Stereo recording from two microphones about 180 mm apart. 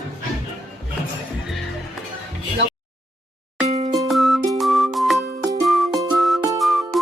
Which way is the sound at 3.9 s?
Centre (ahead or behind).